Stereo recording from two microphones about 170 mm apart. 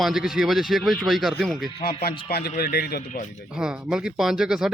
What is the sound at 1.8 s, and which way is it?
Speech, 60° left (ahead or behind).